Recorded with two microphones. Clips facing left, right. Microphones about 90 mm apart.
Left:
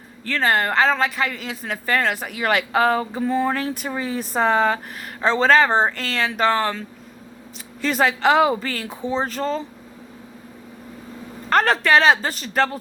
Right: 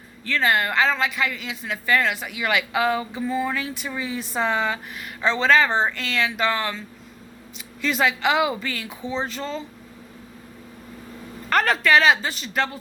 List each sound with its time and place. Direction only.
0.3 s speech: 40° left (ahead or behind)
7.8 s speech: 40° left (ahead or behind)
11.4 s speech: 35° left (ahead or behind)